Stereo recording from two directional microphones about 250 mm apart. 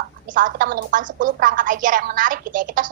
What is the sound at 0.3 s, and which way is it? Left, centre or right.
A woman's voice, right.